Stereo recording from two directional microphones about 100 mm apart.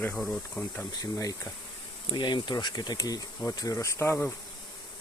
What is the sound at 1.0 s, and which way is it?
Speech, 35° left (ahead or behind).